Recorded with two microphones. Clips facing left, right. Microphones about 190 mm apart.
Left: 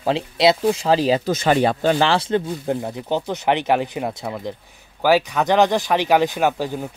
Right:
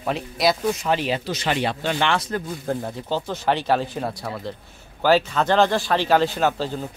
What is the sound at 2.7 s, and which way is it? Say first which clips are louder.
Speech: left 3 dB; 15° left (ahead or behind).